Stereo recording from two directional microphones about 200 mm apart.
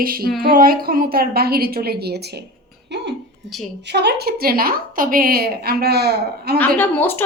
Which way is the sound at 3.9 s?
55° right (ahead or behind).